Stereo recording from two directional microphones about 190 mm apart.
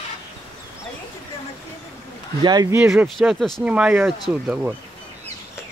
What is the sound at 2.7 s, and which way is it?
Speech, centre (ahead or behind).